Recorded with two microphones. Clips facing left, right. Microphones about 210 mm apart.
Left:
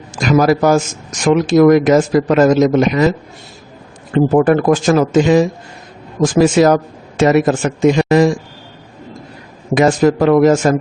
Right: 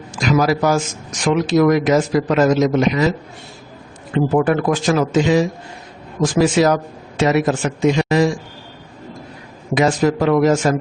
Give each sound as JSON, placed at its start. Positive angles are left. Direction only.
{"t": 0.2, "sound": "a man's voice", "side_deg": 50}
{"t": 4.1, "sound": "speech", "side_deg": 45}
{"t": 9.7, "sound": "speech", "side_deg": 50}